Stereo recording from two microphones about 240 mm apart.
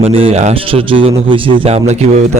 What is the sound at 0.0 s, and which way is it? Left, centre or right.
Speech, right.